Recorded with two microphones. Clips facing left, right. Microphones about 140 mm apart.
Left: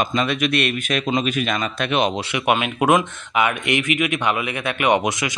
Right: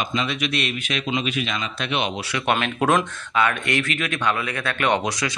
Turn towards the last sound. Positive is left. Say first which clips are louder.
# left 3 dB
turn(degrees=20)  # may be behind; listen again after turning